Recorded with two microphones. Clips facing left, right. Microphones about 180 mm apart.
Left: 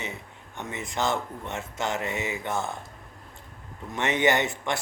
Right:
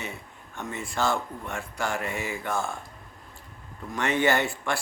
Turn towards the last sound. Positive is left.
turn(degrees=20)  # may be behind; listen again after turning